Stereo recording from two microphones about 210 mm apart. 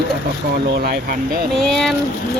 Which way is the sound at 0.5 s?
50° right (ahead or behind).